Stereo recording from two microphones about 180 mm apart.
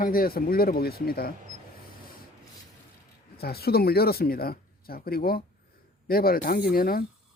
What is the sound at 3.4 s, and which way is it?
Speech, 60° left (ahead or behind).